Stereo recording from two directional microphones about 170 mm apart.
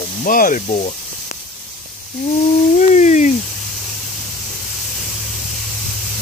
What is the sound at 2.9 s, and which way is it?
Speech, 45° left (ahead or behind).